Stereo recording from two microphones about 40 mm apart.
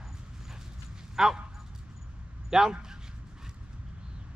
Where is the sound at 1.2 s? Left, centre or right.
Centre.